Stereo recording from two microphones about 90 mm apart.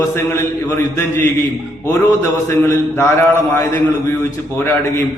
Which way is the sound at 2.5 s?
30° left (ahead or behind).